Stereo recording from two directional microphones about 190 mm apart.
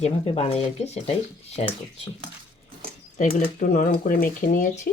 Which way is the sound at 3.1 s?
40° left (ahead or behind).